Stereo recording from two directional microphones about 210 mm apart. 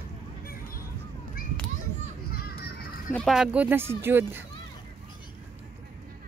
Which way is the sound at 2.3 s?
45° left (ahead or behind).